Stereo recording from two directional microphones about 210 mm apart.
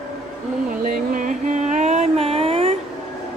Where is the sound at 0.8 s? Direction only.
40° right (ahead or behind).